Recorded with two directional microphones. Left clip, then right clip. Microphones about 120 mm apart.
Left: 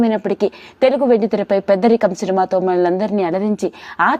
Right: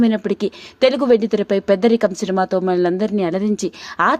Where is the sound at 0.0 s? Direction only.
35° right (ahead or behind).